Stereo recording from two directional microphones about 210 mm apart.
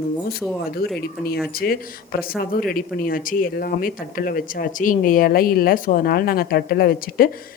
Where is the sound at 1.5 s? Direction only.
45° left (ahead or behind).